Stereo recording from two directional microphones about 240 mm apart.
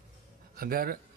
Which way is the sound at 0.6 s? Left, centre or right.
Right.